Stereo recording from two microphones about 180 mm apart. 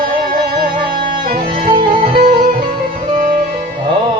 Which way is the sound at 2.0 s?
55° right (ahead or behind).